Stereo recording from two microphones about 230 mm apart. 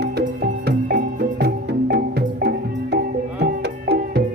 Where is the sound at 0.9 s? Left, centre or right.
Right.